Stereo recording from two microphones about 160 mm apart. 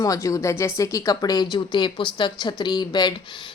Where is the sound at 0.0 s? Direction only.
20° left (ahead or behind).